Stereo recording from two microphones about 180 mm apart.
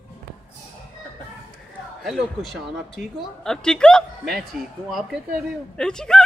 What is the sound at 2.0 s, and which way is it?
A woman's voice, centre (ahead or behind).